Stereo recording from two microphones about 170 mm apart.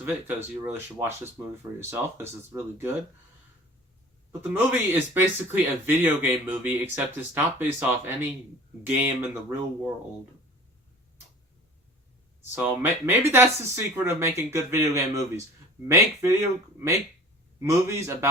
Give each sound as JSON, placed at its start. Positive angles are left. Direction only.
{"t": 0.0, "sound": "speech", "side_deg": -10}
{"t": 4.3, "sound": "speech", "side_deg": -10}
{"t": 12.4, "sound": "speech", "side_deg": -10}
{"t": 17.6, "sound": "speech", "side_deg": -15}